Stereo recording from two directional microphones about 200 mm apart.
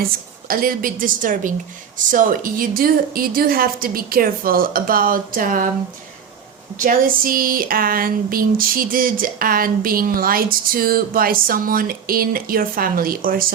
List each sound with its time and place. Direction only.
0.0 s speech: 45° right (ahead or behind)
6.7 s speech: 45° right (ahead or behind)